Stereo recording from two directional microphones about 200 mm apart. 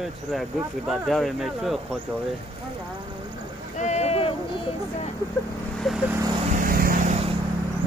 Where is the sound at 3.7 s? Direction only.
35° left (ahead or behind).